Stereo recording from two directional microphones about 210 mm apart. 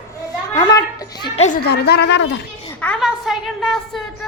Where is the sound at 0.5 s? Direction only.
15° left (ahead or behind).